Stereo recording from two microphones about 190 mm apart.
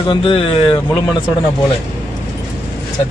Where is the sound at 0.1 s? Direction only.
30° left (ahead or behind).